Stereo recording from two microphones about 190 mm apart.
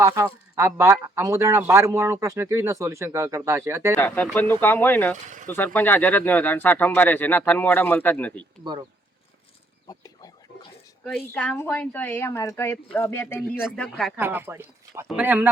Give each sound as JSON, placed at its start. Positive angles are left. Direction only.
{"t": 0.0, "sound": "speech", "side_deg": -15}
{"t": 3.9, "sound": "speech", "side_deg": 10}
{"t": 5.2, "sound": "speech", "side_deg": -40}
{"t": 5.5, "sound": "speech", "side_deg": 10}
{"t": 9.9, "sound": "a sound", "side_deg": 20}
{"t": 11.0, "sound": "speech", "side_deg": 5}
{"t": 13.6, "sound": "speech", "side_deg": 0}
{"t": 14.2, "sound": "speech", "side_deg": -10}